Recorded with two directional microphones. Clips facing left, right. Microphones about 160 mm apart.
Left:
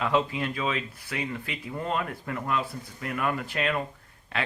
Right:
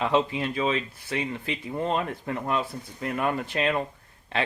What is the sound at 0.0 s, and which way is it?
Speech, 25° right (ahead or behind).